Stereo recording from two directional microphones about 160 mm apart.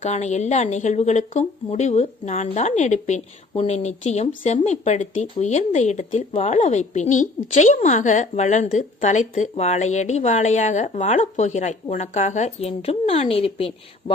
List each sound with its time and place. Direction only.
0.0 s speech: 45° left (ahead or behind)